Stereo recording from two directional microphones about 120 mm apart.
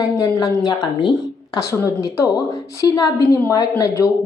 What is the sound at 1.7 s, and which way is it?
Speech, 25° left (ahead or behind).